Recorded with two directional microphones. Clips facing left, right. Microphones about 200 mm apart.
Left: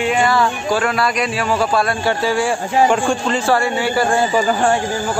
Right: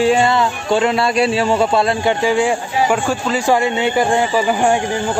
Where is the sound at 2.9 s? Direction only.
5° right (ahead or behind).